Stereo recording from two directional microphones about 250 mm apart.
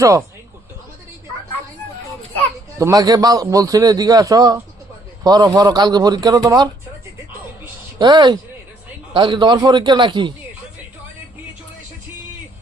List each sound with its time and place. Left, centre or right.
0.0 s a man's voice: centre
2.7 s a man's voice: centre
7.9 s a man's voice: centre